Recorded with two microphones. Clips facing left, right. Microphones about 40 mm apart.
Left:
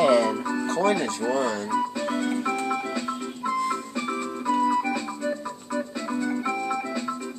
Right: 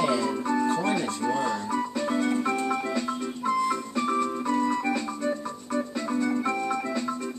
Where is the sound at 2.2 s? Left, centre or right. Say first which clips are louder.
Right 2 dB; centre.